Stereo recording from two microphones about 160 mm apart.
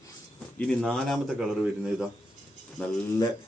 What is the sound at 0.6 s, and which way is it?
Speech, 5° left (ahead or behind).